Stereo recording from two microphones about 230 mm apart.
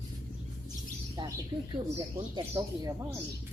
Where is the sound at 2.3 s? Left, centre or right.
Centre.